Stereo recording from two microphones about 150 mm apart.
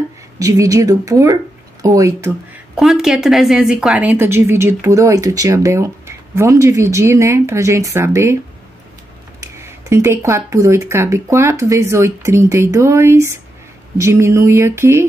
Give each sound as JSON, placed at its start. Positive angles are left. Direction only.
{"t": 0.4, "sound": "speech", "side_deg": -25}
{"t": 2.7, "sound": "a woman's voice", "side_deg": 0}
{"t": 9.4, "sound": "speech", "side_deg": -20}